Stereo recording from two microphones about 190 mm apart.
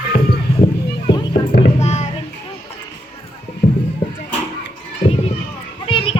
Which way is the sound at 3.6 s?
60° left (ahead or behind).